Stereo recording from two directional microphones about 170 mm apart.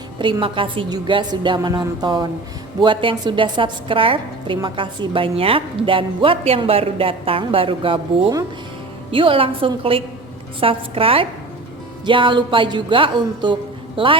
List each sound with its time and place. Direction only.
0.2 s a woman's voice: 30° right (ahead or behind)